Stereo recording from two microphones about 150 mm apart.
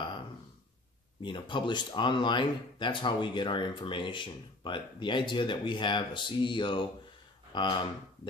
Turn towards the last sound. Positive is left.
turn(degrees=30)  # may be behind; listen again after turning